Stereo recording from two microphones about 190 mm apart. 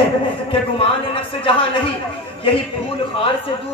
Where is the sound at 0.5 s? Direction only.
30° left (ahead or behind).